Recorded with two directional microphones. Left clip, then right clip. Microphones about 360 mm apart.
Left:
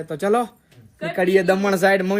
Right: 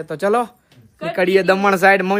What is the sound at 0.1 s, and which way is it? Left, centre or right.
A man's voice, centre.